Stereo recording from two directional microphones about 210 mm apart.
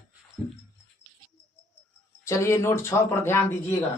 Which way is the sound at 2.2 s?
15° left (ahead or behind).